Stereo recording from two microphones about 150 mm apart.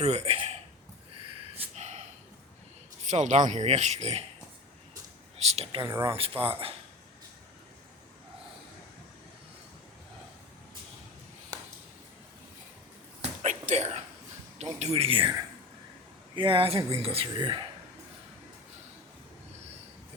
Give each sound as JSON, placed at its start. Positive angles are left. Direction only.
{"t": 0.0, "sound": "speech", "side_deg": -45}
{"t": 1.5, "sound": "gasp", "side_deg": -50}
{"t": 3.1, "sound": "speech", "side_deg": -55}
{"t": 5.4, "sound": "speech", "side_deg": -45}
{"t": 5.9, "sound": "speech", "side_deg": -20}
{"t": 6.1, "sound": "speech", "side_deg": -40}
{"t": 13.2, "sound": "a sound", "side_deg": -50}
{"t": 16.3, "sound": "speech", "side_deg": -35}